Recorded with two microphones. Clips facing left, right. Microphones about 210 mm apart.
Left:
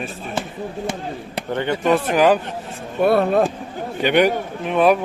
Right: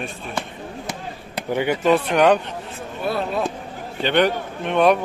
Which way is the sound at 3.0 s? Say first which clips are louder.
Left 8 dB; 55° left (ahead or behind).